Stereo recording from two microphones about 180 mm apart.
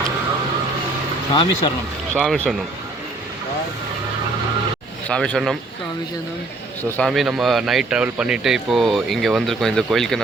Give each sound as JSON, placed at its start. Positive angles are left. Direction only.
{"t": 1.3, "sound": "speech", "side_deg": 25}
{"t": 2.1, "sound": "speech", "side_deg": 5}
{"t": 5.0, "sound": "speech", "side_deg": 5}
{"t": 6.9, "sound": "speech", "side_deg": 0}